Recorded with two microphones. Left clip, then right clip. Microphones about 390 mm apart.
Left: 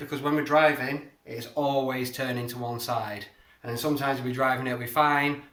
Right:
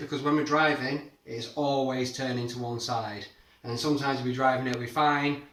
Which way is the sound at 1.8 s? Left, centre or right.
Centre.